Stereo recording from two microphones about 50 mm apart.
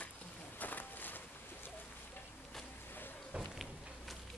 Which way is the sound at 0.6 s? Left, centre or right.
Left.